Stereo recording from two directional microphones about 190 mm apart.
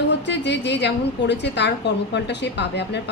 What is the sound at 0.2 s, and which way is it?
A woman's voice, 65° left (ahead or behind).